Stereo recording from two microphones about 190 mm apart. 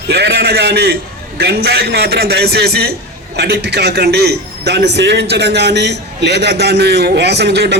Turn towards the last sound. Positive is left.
turn(degrees=-60)  # may be behind; listen again after turning